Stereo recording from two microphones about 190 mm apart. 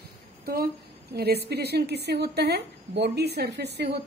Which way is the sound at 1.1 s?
55° right (ahead or behind).